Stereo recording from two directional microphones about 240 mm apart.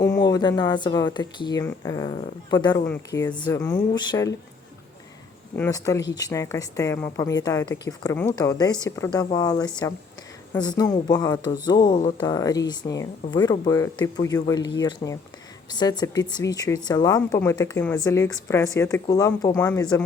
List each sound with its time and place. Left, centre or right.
0.0 s speech: centre
5.5 s speech: centre